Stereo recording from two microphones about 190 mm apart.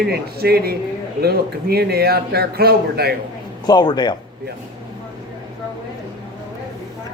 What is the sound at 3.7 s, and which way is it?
Speech, 20° left (ahead or behind).